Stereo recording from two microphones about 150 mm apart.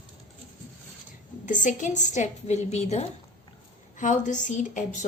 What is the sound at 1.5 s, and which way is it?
A woman's voice, 55° left (ahead or behind).